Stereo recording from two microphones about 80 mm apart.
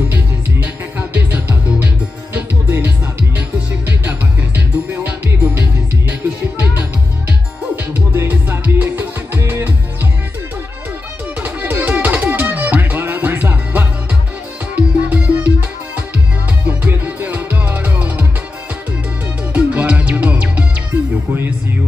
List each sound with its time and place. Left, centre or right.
0.1 s music: right
11.4 s music: right
16.6 s music: right
19.5 s music: right